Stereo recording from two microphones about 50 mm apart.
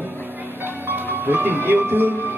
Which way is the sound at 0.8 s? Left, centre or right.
Right.